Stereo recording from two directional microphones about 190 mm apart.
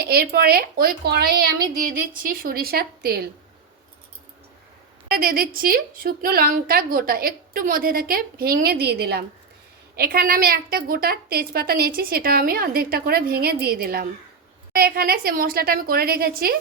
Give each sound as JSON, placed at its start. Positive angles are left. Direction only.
{"t": 0.0, "sound": "a child's voice", "side_deg": -55}
{"t": 5.1, "sound": "a woman's voice", "side_deg": -50}